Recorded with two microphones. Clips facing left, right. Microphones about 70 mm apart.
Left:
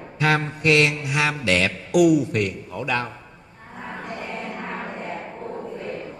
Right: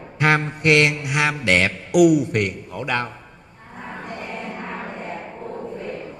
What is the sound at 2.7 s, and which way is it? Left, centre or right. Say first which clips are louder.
Speech: right 1 dB; right.